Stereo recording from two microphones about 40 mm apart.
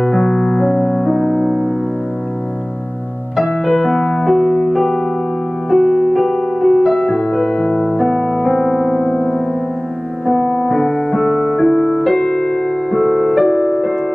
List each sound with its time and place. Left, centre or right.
0.0 s keyboard: centre
0.6 s music: centre
1.4 s music: left
3.3 s piano: centre
5.7 s music: centre
7.6 s music: left
8.0 s music: centre
8.4 s keyboard: centre
9.0 s music: left
10.7 s music: centre
11.4 s music: centre